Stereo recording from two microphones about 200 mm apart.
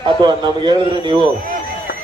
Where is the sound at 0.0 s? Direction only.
20° right (ahead or behind).